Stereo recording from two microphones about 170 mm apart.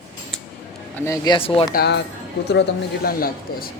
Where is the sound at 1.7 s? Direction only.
75° left (ahead or behind).